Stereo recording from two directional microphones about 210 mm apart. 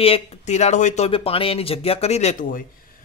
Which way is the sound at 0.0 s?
30° left (ahead or behind).